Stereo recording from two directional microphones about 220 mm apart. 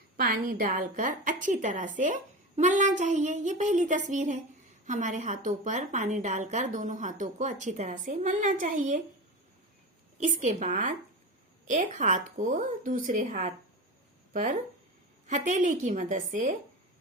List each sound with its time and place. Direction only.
0.2 s a woman's voice: 40° right (ahead or behind)
10.2 s a woman's voice: 35° right (ahead or behind)
15.3 s a woman's voice: 35° right (ahead or behind)